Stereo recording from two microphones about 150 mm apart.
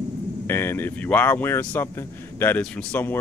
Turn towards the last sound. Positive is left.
turn(degrees=10)  # may be behind; listen again after turning